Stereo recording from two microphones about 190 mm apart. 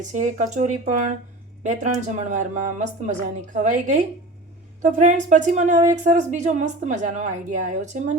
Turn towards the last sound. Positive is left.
turn(degrees=-40)  # may be behind; listen again after turning